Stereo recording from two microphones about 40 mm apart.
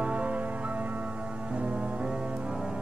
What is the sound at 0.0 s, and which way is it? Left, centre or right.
Music, right.